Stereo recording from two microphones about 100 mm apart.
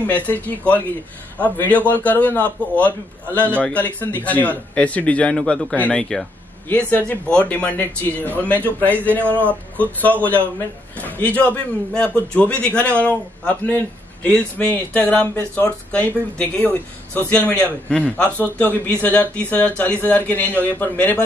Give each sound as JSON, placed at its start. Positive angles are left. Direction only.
{"t": 0.0, "sound": "a man's voice", "side_deg": 15}